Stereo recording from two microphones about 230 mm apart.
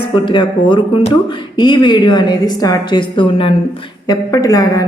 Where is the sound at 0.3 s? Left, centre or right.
Left.